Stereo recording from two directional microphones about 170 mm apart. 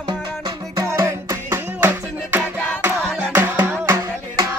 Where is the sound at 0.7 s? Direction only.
15° right (ahead or behind).